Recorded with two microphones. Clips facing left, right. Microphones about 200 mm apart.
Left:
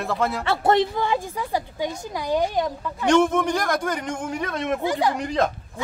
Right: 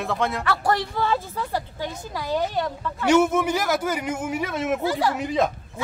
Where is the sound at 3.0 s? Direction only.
5° right (ahead or behind).